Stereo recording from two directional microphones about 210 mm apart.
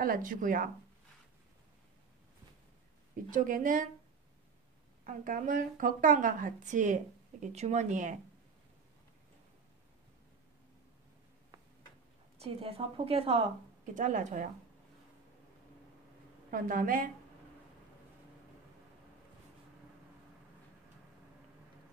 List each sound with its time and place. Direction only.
0.0 s speech: 40° right (ahead or behind)
3.3 s speech: 40° right (ahead or behind)
5.0 s speech: 40° right (ahead or behind)
12.4 s a woman's voice: 30° right (ahead or behind)
16.4 s speech: 40° right (ahead or behind)